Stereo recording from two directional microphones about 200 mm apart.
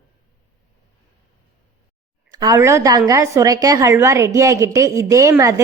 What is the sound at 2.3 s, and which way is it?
A woman's voice, 20° right (ahead or behind).